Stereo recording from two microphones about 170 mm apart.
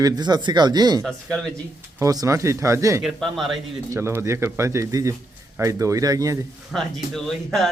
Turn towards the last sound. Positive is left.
turn(degrees=0)  # may be behind; listen again after turning